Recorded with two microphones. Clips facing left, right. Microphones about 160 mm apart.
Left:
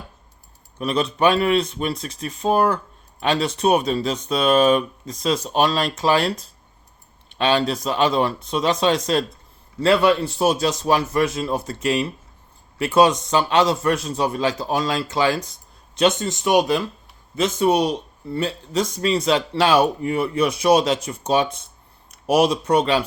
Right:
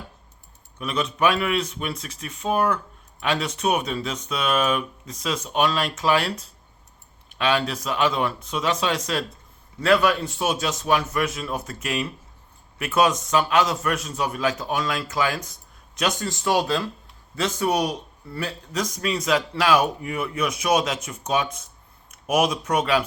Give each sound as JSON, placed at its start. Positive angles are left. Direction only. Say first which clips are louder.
{"t": 0.8, "sound": "speech", "louder": "left 4 dB", "side_deg": 35}